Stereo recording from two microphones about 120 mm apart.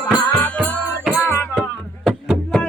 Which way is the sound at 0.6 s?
5° right (ahead or behind).